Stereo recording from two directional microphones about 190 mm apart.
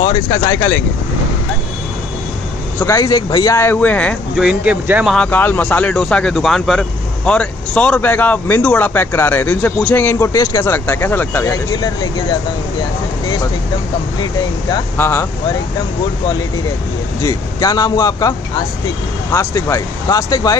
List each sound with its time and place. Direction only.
0.0 s speech: 20° left (ahead or behind)
2.8 s speech: 15° left (ahead or behind)
4.4 s speech: 5° right (ahead or behind)
5.1 s speech: 5° left (ahead or behind)
14.7 s speech: 15° left (ahead or behind)
17.2 s speech: 20° left (ahead or behind)
19.3 s speech: 15° left (ahead or behind)